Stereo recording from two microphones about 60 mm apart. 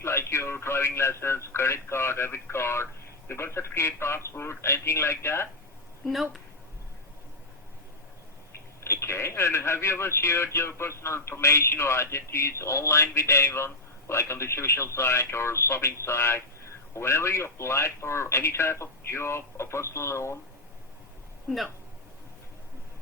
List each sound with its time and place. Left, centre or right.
0.0 s speech: left
6.0 s speech: centre
8.8 s speech: left